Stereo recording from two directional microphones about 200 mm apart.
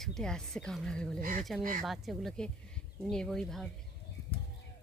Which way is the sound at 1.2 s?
40° right (ahead or behind).